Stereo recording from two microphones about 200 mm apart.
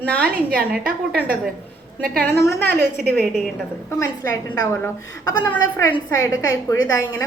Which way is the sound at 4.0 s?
15° left (ahead or behind).